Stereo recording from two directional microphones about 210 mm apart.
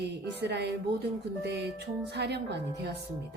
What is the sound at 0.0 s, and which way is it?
A woman's voice, 50° right (ahead or behind).